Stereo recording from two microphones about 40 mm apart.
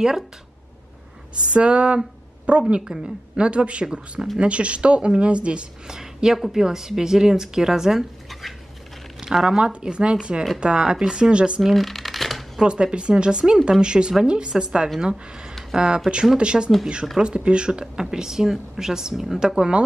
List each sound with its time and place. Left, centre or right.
1.5 s a woman's voice: right
5.9 s speech: centre
8.3 s a sound: centre
9.2 s speech: centre
9.6 s speech: right
11.7 s shuffling cards: centre
12.6 s speech: right